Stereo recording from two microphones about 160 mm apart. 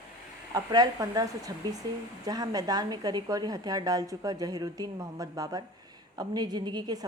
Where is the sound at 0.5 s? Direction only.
25° right (ahead or behind).